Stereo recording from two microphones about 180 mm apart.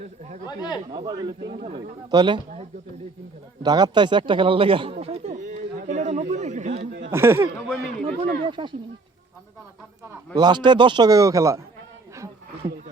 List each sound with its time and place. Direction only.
0.4 s speech: 25° left (ahead or behind)
0.9 s a man's voice: 25° right (ahead or behind)
1.4 s speech: 70° right (ahead or behind)
1.6 s a man's voice: 25° right (ahead or behind)
3.6 s a sound: 20° right (ahead or behind); by 7.1 s 40° right (ahead or behind)
7.1 s speech: 15° right (ahead or behind)
8.0 s a man's voice: 30° right (ahead or behind)
10.3 s a man's voice: 25° right (ahead or behind)
12.1 s a sound: 15° right (ahead or behind)